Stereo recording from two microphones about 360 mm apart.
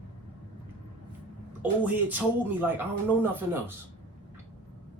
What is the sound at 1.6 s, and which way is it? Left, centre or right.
Speech, centre.